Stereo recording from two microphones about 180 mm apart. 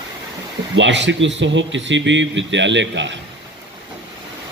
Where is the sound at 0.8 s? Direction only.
85° right.